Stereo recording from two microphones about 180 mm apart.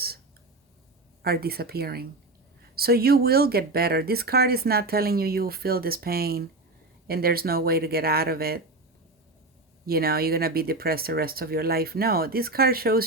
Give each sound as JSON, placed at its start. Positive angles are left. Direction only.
{"t": 1.2, "sound": "speech", "side_deg": -60}
{"t": 9.8, "sound": "speech", "side_deg": -55}